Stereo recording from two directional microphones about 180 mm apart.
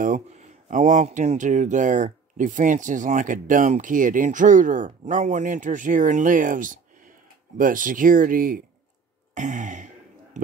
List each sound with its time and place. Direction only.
0.0 s speech: 45° right (ahead or behind)